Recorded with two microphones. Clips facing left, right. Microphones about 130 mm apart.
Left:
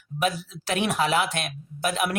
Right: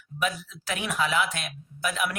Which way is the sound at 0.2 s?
70° left (ahead or behind).